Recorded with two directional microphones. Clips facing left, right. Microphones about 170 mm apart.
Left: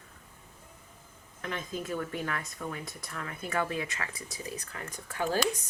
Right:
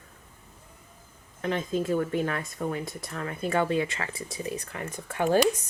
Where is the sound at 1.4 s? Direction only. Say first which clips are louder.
Right 8 dB; 30° right (ahead or behind).